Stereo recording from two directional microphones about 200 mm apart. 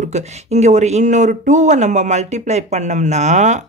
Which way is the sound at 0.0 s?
35° right (ahead or behind).